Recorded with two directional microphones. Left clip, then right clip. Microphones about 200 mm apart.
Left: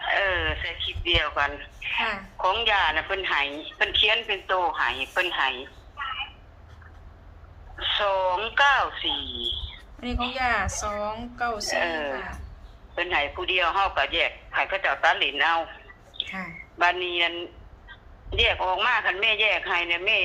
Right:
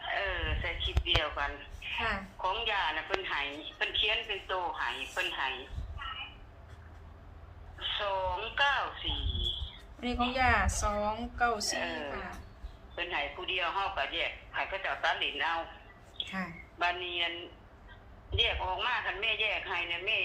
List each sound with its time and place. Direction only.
0.0 s a sound: 55° left (ahead or behind)
2.4 s a woman's voice: 55° left (ahead or behind)
6.0 s a sound: 55° left (ahead or behind)
7.8 s a woman's voice: 55° left (ahead or behind)
10.3 s a woman's voice: 5° left (ahead or behind)
11.7 s a woman's voice: 55° left (ahead or behind)